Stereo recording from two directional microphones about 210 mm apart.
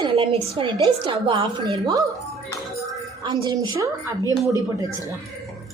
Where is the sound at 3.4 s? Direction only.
20° right (ahead or behind).